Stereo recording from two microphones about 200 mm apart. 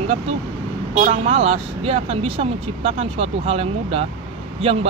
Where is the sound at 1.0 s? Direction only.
30° right (ahead or behind).